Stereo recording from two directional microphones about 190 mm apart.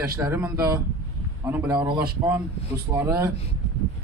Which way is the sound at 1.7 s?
20° right (ahead or behind).